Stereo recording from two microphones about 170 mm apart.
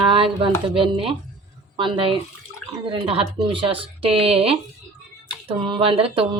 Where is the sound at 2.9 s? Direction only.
35° right (ahead or behind).